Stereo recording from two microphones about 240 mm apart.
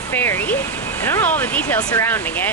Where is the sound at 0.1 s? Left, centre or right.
Centre.